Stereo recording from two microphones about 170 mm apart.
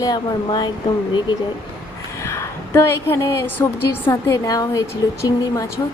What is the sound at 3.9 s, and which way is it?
Speech, 20° left (ahead or behind).